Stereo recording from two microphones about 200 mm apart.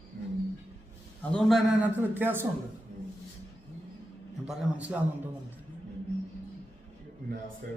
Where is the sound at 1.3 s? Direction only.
Centre (ahead or behind).